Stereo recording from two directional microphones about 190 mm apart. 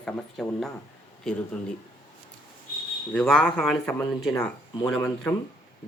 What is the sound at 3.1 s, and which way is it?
Speech, 5° left (ahead or behind).